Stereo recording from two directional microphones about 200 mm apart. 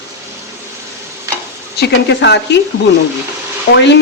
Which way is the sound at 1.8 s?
60° left (ahead or behind).